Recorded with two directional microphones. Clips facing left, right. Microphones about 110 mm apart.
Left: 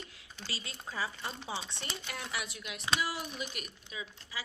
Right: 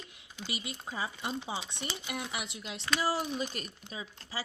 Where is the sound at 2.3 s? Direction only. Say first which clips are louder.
Right 1 dB; 25° right (ahead or behind).